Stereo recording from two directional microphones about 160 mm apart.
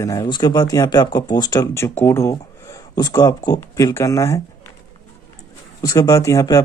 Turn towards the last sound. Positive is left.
turn(degrees=20)  # may be behind; listen again after turning